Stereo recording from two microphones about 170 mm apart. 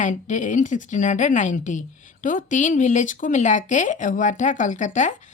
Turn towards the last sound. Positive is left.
turn(degrees=45)  # may be behind; listen again after turning